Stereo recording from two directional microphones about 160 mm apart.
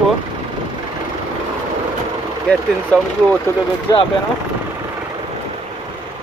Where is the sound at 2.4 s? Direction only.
5° left (ahead or behind).